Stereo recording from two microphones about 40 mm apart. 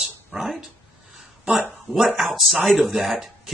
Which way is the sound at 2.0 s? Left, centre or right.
Centre.